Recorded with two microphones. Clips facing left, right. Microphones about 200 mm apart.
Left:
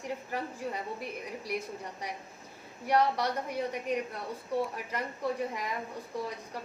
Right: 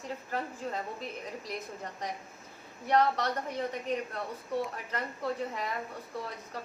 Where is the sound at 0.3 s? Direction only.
15° left (ahead or behind).